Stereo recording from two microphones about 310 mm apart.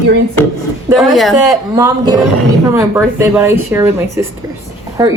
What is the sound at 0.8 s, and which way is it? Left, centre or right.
Speech, centre.